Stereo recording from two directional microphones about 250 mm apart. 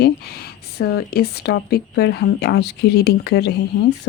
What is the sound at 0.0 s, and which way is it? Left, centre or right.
Speech, left.